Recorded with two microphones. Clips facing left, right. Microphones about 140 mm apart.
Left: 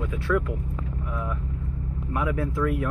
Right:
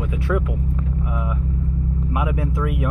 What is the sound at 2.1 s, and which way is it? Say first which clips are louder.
Speech: even; 15° right (ahead or behind).